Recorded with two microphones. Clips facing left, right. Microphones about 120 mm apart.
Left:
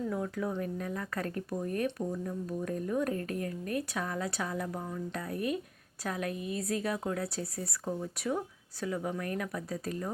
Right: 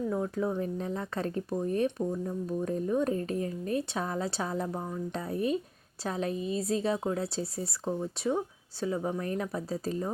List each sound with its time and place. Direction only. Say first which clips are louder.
0.1 s speech: right 3 dB; 25° right (ahead or behind)